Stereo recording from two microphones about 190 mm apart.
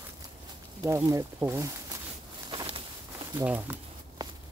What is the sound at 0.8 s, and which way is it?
Speech, 15° right (ahead or behind).